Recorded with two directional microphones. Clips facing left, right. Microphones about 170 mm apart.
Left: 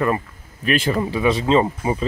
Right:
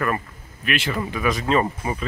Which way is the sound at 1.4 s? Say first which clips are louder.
Left 4 dB; 20° left (ahead or behind).